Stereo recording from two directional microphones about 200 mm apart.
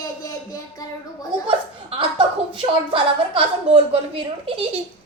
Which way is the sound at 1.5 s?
25° right (ahead or behind).